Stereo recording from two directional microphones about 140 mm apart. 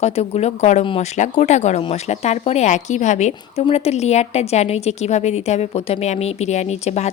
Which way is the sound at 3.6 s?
45° left (ahead or behind).